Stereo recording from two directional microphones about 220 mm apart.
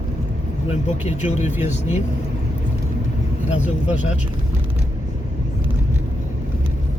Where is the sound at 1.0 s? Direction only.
30° left (ahead or behind).